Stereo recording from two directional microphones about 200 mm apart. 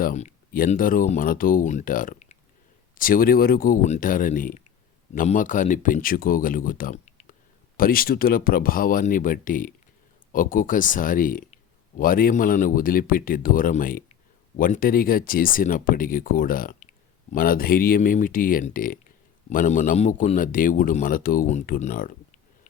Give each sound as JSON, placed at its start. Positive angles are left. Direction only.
{"t": 0.0, "sound": "speech", "side_deg": 40}
{"t": 7.8, "sound": "speech", "side_deg": 45}